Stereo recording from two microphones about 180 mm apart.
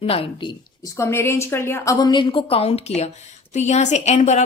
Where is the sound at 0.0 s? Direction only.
30° left (ahead or behind).